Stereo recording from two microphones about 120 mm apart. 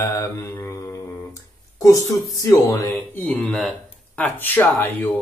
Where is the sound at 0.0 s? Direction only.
25° left (ahead or behind).